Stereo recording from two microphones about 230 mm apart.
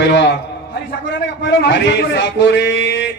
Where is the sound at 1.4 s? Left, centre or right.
Left.